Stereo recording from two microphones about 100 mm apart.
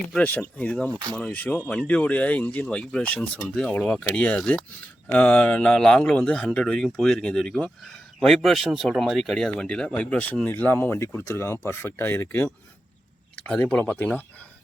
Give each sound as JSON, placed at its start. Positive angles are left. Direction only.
{"t": 0.2, "sound": "speech", "side_deg": 15}
{"t": 13.3, "sound": "speech", "side_deg": 10}